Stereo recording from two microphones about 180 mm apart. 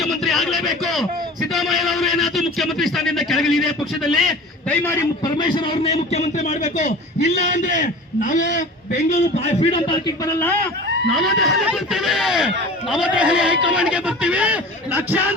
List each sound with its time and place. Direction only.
0.0 s a man's voice: centre (ahead or behind)
5.2 s a man's voice: 25° left (ahead or behind)
10.2 s a man's voice: 15° left (ahead or behind)
11.1 s a man's voice: centre (ahead or behind)